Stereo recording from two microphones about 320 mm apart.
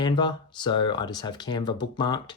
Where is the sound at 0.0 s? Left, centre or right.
Centre.